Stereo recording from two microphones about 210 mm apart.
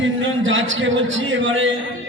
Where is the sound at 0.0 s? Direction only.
65° right (ahead or behind).